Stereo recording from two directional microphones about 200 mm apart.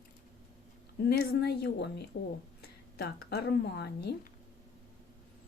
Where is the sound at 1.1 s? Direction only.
55° left (ahead or behind).